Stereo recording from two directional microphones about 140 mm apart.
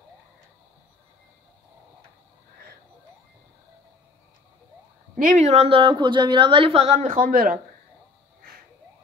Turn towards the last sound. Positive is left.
turn(degrees=-90)